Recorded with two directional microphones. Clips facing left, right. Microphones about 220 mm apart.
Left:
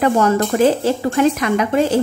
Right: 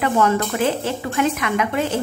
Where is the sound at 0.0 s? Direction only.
40° left (ahead or behind).